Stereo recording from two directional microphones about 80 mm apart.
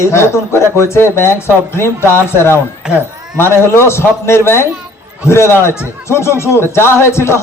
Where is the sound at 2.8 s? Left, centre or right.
Centre.